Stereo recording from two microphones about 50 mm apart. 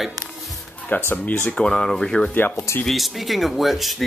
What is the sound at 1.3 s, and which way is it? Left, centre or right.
Speech, centre.